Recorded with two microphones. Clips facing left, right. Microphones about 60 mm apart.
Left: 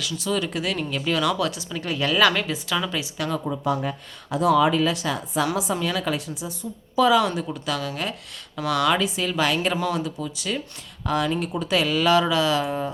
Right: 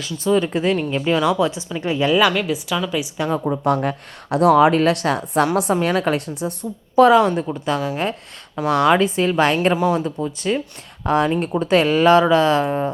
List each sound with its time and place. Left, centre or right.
0.0 s a woman's voice: right; by 3.0 s centre
3.0 s a woman's voice: right
3.4 s a woman's voice: right
7.2 s speech: right
9.7 s a woman's voice: right
10.0 s speech: right